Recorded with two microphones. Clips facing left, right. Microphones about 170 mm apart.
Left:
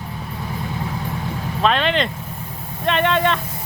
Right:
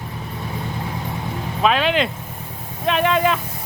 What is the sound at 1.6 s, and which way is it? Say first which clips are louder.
Speech: right 1 dB; 5° right (ahead or behind).